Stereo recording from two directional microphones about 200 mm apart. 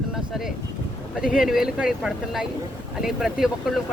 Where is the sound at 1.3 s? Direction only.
Centre (ahead or behind).